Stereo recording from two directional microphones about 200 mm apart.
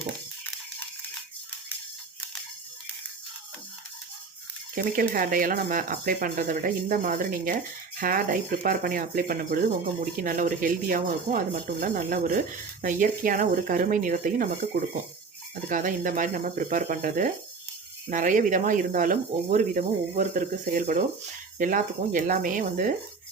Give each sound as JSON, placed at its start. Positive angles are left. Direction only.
{"t": 4.7, "sound": "speech", "side_deg": -45}
{"t": 15.7, "sound": "speech", "side_deg": -40}